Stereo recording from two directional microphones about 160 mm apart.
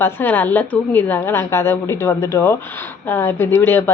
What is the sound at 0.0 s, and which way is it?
A woman's voice, 10° left (ahead or behind).